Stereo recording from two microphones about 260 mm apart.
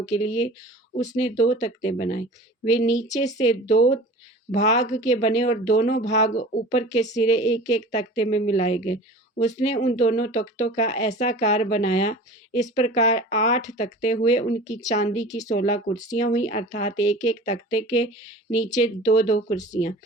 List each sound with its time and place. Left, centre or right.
0.0 s speech: left
1.0 s speech: centre
3.1 s speech: left
5.1 s speech: centre
5.4 s speech: left